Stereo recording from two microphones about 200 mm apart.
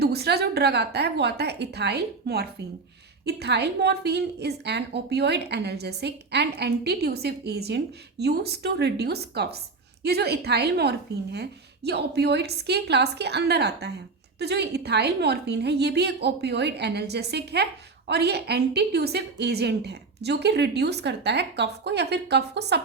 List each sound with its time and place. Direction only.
0.0 s a woman's voice: 55° right (ahead or behind)